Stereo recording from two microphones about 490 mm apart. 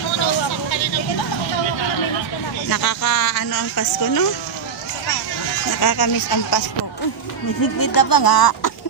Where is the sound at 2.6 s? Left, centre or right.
Left.